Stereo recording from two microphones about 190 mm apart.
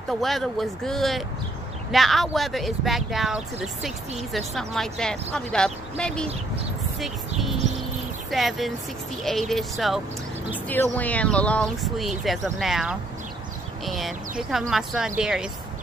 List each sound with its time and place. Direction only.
0.2 s speech: centre (ahead or behind)